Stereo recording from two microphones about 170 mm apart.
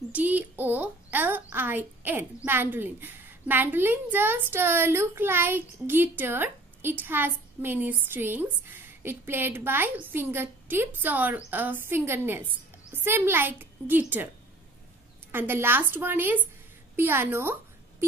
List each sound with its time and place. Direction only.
0.1 s a woman's voice: 10° right (ahead or behind)
15.3 s a woman's voice: 15° right (ahead or behind)